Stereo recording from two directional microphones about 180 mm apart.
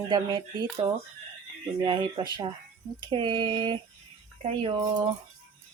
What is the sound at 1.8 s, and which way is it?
Speech, 25° right (ahead or behind).